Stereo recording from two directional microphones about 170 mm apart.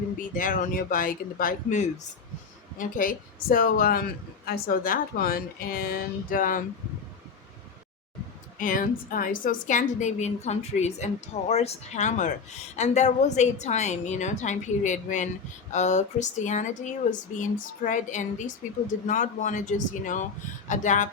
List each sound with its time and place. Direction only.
0.2 s a woman's voice: 50° left (ahead or behind)
8.5 s a woman's voice: 50° left (ahead or behind)